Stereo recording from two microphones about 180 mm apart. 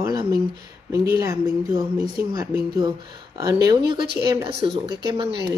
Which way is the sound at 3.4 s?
20° right (ahead or behind).